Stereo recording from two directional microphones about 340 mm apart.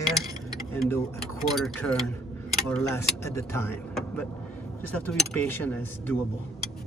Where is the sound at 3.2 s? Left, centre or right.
Centre.